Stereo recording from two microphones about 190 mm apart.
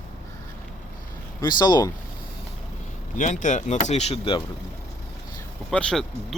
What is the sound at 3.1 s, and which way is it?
Speech, 40° left (ahead or behind).